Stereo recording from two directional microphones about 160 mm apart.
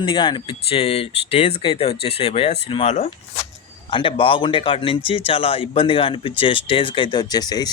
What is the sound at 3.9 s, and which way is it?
Speech, 30° left (ahead or behind).